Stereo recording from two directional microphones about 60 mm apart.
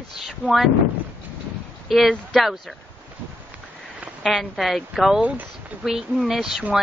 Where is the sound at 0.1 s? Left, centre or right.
Centre.